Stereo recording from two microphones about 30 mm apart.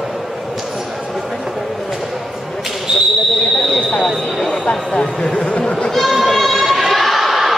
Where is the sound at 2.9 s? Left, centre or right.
Right.